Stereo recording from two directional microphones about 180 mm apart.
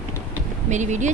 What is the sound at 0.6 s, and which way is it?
Speech, 40° right (ahead or behind).